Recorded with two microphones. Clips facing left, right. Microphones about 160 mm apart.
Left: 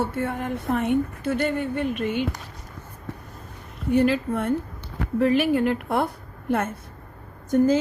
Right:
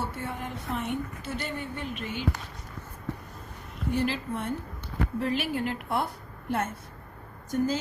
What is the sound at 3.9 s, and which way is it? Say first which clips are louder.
A woman's voice: left 9 dB; 55° left (ahead or behind).